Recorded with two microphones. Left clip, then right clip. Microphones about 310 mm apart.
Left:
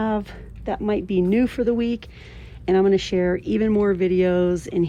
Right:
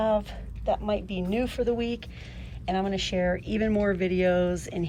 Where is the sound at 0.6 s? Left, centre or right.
Left.